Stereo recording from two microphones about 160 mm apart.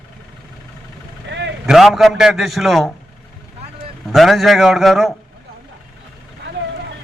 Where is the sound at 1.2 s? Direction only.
90° right.